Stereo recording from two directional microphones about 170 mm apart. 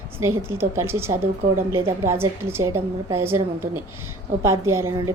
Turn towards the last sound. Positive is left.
turn(degrees=-15)  # may be behind; listen again after turning